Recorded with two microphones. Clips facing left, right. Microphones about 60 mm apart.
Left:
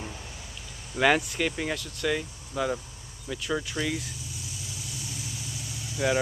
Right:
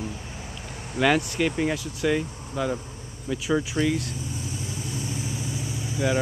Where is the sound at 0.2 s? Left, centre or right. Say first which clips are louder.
Right 5 dB; right.